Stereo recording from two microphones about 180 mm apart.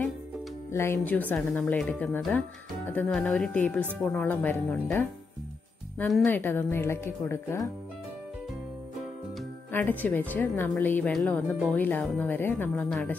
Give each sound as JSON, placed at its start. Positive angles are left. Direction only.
{"t": 0.7, "sound": "speech", "side_deg": 15}
{"t": 9.7, "sound": "speech", "side_deg": 10}